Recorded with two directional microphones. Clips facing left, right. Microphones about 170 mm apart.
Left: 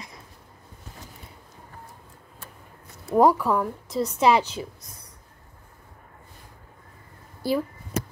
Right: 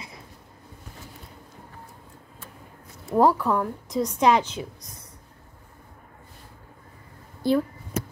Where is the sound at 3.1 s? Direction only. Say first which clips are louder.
Left 1 dB; 10° left (ahead or behind).